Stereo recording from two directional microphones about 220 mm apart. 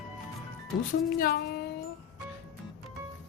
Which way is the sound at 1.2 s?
45° left (ahead or behind).